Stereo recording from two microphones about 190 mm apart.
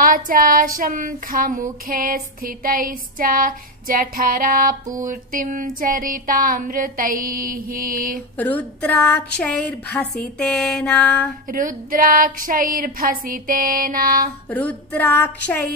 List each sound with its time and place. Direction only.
0.0 s child singing: 45° right (ahead or behind)
8.4 s a woman's voice: 10° left (ahead or behind)
11.4 s child singing: 45° right (ahead or behind)
14.5 s a woman's voice: 10° left (ahead or behind)